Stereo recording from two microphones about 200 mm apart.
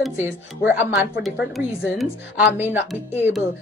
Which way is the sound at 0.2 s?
10° right (ahead or behind).